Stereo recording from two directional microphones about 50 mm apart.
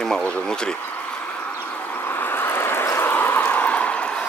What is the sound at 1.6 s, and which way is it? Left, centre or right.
Vehicle, left.